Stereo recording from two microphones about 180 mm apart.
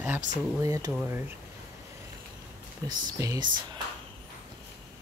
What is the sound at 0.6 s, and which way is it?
Speech, 15° right (ahead or behind).